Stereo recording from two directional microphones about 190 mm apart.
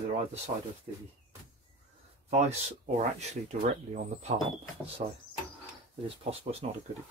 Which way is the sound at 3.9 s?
35° right (ahead or behind).